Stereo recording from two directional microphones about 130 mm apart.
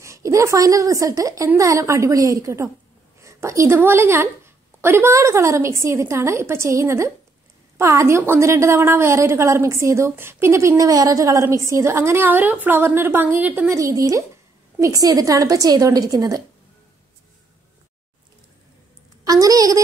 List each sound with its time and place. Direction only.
0.0 s a woman's voice: 25° right (ahead or behind)
13.7 s a woman's voice: 25° right (ahead or behind)
19.2 s a woman's voice: 30° right (ahead or behind)